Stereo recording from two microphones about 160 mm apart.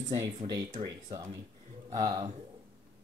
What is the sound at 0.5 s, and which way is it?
Speech, 25° right (ahead or behind).